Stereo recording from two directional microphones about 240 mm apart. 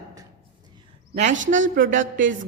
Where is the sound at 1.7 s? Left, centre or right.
Right.